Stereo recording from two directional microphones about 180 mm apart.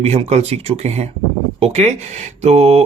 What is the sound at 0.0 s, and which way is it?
Speech, 35° right (ahead or behind).